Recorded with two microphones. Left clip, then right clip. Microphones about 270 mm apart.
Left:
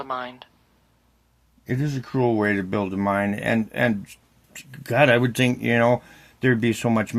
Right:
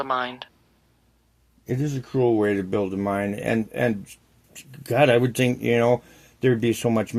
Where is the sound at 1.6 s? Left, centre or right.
Left.